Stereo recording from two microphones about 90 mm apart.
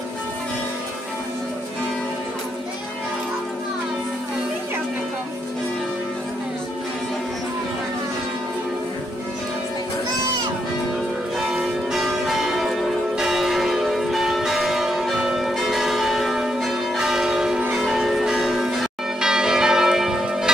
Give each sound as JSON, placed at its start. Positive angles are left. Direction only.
{"t": 11.3, "sound": "change ringing", "side_deg": -5}
{"t": 13.2, "sound": "church bell", "side_deg": -5}
{"t": 17.7, "sound": "change ringing", "side_deg": 0}
{"t": 19.2, "sound": "church bell", "side_deg": -5}